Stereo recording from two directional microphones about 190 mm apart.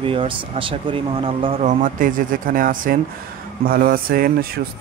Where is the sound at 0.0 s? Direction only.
30° right (ahead or behind).